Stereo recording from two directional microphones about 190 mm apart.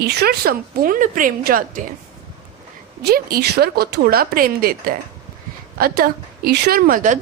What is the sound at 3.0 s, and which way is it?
A woman's voice, 55° right (ahead or behind).